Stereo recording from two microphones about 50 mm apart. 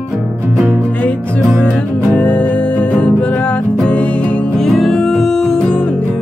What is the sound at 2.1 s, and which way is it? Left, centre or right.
Music, left.